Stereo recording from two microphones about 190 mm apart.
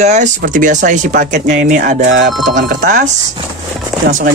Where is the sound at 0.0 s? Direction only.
40° right (ahead or behind).